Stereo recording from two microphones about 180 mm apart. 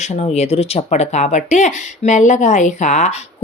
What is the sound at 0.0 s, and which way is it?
A woman's voice, 40° left (ahead or behind).